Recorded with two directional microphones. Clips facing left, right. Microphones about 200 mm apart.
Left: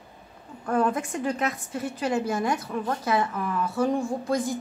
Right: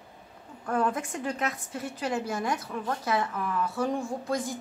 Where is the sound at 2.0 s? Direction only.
15° left (ahead or behind).